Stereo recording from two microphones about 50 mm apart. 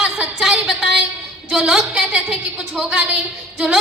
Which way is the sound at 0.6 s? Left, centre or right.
Centre.